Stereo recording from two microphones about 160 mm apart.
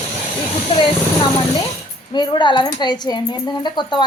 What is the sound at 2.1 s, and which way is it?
Speech, 30° left (ahead or behind).